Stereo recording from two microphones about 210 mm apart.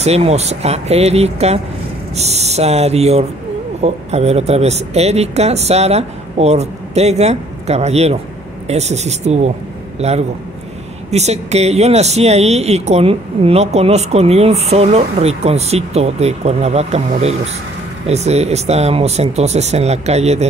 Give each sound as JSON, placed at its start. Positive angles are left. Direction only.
{"t": 0.0, "sound": "a man's voice", "side_deg": -30}